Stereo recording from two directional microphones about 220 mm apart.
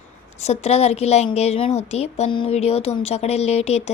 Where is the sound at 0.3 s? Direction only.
30° left (ahead or behind).